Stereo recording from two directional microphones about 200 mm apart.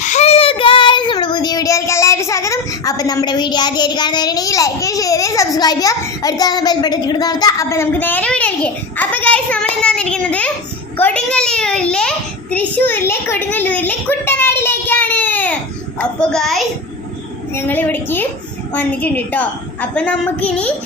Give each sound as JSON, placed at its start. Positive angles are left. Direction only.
{"t": 0.0, "sound": "child singing", "side_deg": 35}
{"t": 10.9, "sound": "a child's voice", "side_deg": 5}